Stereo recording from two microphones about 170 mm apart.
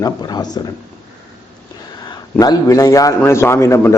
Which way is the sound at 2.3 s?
20° left (ahead or behind).